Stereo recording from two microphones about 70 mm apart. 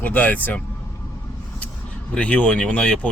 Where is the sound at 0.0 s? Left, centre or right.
Left.